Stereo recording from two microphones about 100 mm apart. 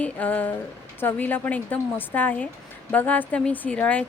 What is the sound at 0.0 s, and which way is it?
Speech, 15° left (ahead or behind).